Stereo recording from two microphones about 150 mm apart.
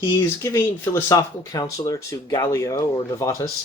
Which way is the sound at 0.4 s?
20° left (ahead or behind).